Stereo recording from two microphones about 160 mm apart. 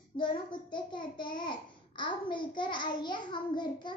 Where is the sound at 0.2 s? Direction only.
30° left (ahead or behind).